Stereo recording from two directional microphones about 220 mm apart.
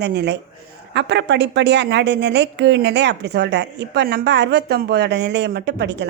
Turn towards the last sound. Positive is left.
turn(degrees=-50)  # may be behind; listen again after turning